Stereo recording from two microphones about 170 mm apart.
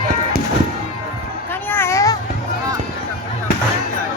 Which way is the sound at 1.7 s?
15° left (ahead or behind).